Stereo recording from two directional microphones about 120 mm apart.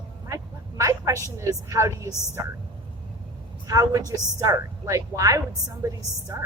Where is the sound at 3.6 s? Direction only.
30° right (ahead or behind).